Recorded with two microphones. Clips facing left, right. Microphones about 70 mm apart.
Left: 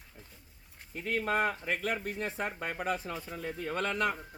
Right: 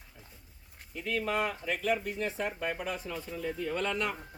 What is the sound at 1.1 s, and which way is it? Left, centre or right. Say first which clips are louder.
Speech: left 1 dB; left.